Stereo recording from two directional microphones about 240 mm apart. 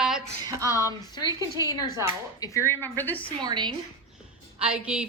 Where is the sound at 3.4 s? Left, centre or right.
Centre.